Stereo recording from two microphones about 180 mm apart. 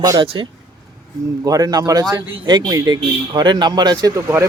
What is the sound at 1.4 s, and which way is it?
A man's voice, 20° right (ahead or behind).